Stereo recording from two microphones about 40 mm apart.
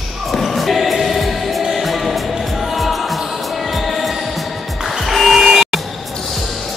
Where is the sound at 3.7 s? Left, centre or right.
Centre.